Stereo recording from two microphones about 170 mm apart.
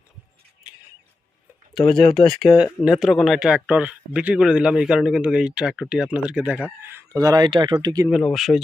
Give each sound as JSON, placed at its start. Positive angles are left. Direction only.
{"t": 1.8, "sound": "speech", "side_deg": 30}
{"t": 2.3, "sound": "speech", "side_deg": 0}
{"t": 8.1, "sound": "speech", "side_deg": 0}